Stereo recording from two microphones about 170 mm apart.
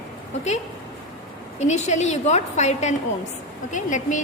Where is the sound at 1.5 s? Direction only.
45° left (ahead or behind).